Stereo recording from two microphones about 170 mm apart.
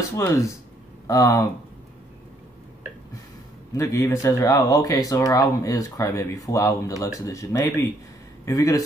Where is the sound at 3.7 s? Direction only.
15° left (ahead or behind).